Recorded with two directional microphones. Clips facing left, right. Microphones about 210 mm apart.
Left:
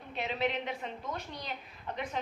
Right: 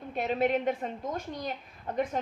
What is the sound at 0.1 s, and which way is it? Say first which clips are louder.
A woman's voice: right 6 dB; 50° right (ahead or behind).